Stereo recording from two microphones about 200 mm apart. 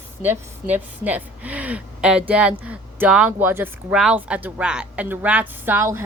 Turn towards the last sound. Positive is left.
turn(degrees=-10)  # may be behind; listen again after turning